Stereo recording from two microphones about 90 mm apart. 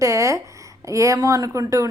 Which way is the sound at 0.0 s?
35° right (ahead or behind).